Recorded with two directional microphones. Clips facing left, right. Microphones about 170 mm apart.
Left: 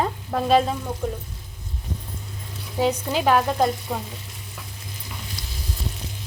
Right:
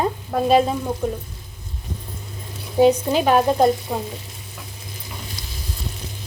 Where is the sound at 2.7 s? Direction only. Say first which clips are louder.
Right 7 dB; 20° right (ahead or behind).